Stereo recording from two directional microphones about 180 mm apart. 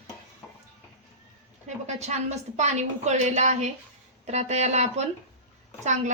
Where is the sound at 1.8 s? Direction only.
40° right (ahead or behind).